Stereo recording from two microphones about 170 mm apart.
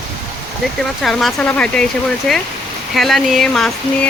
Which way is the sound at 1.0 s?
Centre (ahead or behind).